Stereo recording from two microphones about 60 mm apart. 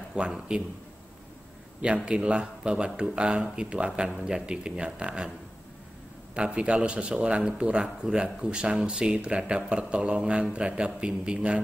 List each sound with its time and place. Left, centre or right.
0.2 s a man's voice: centre
2.0 s speech: centre
6.3 s speech: centre